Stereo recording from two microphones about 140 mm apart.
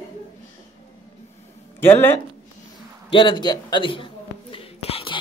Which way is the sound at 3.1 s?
35° left (ahead or behind).